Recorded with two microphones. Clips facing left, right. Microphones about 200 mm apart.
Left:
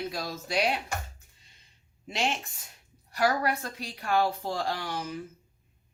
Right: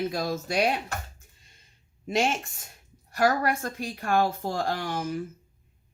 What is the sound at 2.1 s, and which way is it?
A woman's voice, 50° right (ahead or behind).